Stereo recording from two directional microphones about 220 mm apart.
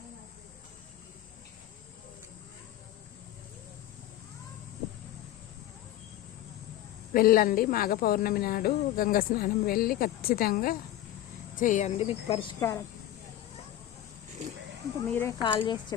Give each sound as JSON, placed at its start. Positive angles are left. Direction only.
{"t": 7.1, "sound": "speech", "side_deg": 40}
{"t": 15.1, "sound": "speech", "side_deg": 10}